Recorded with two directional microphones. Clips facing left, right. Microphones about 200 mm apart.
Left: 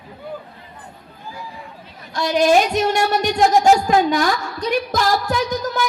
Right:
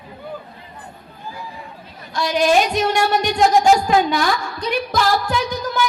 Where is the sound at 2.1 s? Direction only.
45° left (ahead or behind).